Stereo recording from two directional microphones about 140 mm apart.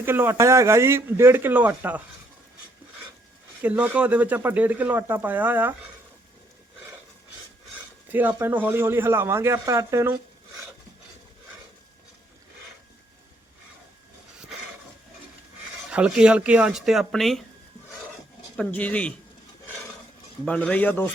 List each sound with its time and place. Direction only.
0.0 s speech: 15° right (ahead or behind)
3.6 s speech: 10° right (ahead or behind)
8.4 s speech: 15° right (ahead or behind)
15.9 s speech: 10° right (ahead or behind)
18.5 s a man's voice: 5° left (ahead or behind)
20.4 s a man's voice: 10° left (ahead or behind)